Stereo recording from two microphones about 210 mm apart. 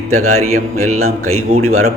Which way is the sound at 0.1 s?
90° right.